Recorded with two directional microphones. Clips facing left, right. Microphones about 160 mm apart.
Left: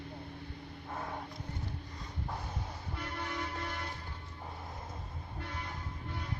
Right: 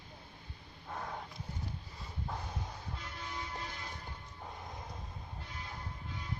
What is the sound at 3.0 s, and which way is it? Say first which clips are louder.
Music: left 8 dB; 65° left (ahead or behind).